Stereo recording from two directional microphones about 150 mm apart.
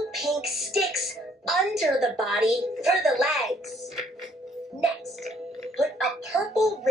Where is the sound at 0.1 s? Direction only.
Centre (ahead or behind).